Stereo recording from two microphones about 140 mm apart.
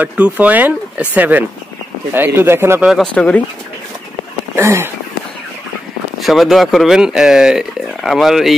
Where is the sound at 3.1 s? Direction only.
10° left (ahead or behind).